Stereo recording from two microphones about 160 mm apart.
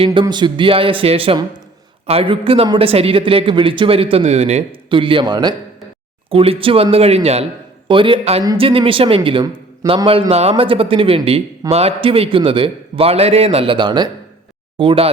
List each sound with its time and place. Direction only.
0.0 s a man's voice: 30° right (ahead or behind)